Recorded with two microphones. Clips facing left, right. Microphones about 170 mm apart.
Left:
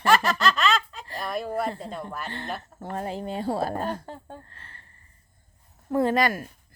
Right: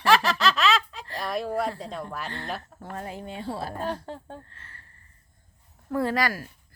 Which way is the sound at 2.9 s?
30° left (ahead or behind).